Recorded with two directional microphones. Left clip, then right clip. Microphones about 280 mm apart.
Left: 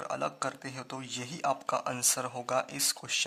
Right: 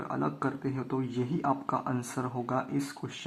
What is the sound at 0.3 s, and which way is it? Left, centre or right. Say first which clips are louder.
Speech: right 3 dB; left.